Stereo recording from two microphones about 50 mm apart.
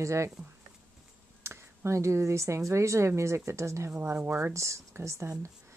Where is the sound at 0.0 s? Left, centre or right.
Right.